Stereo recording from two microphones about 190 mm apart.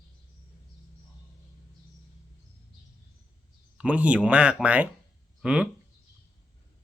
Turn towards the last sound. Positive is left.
turn(degrees=-5)  # may be behind; listen again after turning